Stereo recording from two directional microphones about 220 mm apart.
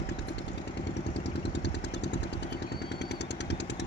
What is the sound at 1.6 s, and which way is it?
Vehicle, 50° left (ahead or behind).